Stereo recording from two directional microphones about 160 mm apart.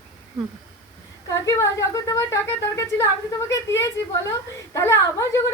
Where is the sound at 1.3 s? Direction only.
20° left (ahead or behind).